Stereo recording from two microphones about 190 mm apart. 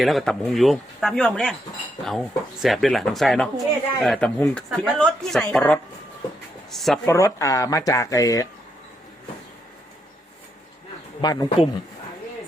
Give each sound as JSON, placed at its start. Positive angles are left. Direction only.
{"t": 0.0, "sound": "speech", "side_deg": 0}
{"t": 7.0, "sound": "speech", "side_deg": 15}
{"t": 11.2, "sound": "speech", "side_deg": 20}